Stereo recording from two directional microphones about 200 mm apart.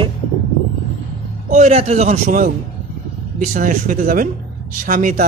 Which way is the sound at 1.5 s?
35° right (ahead or behind).